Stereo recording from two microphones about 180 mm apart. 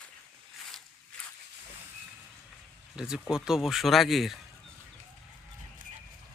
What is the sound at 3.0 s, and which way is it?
Speech, 5° right (ahead or behind).